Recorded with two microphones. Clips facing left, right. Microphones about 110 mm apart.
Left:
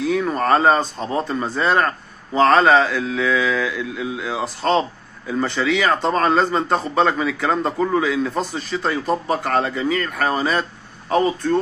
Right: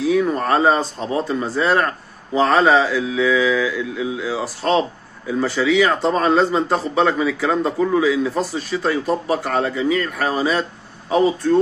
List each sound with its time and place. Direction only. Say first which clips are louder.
0.0 s speech: right 2 dB; 5° right (ahead or behind)